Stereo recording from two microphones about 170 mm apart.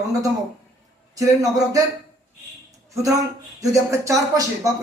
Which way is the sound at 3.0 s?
20° right (ahead or behind).